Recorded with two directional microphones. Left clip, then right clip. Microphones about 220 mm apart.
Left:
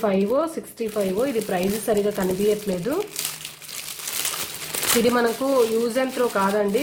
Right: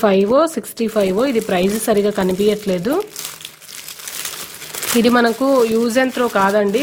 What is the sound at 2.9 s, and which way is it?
Crumpling, 45° right (ahead or behind).